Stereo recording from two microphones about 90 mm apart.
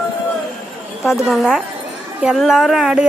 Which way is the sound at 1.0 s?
Centre (ahead or behind).